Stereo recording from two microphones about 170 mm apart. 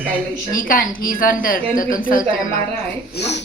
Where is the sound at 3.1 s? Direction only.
85° left.